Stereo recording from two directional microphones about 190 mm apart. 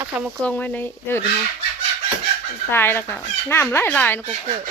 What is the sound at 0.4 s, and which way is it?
Speech, 10° left (ahead or behind).